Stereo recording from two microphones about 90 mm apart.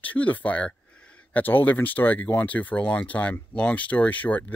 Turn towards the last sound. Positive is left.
turn(degrees=15)  # may be behind; listen again after turning